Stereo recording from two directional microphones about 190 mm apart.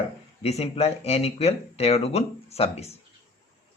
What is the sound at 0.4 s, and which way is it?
Speech, 35° left (ahead or behind).